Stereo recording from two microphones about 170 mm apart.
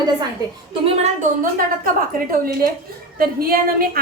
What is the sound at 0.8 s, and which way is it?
Speech, 40° right (ahead or behind).